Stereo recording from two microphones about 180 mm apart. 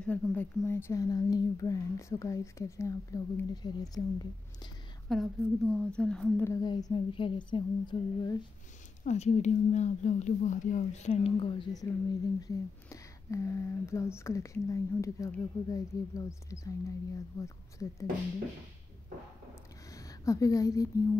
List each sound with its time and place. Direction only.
0.0 s speech: 10° left (ahead or behind)
5.0 s a woman's voice: centre (ahead or behind); by 8.4 s 25° left (ahead or behind)
9.0 s a woman's voice: 35° left (ahead or behind); by 18.0 s 15° left (ahead or behind)
19.9 s speech: 20° left (ahead or behind)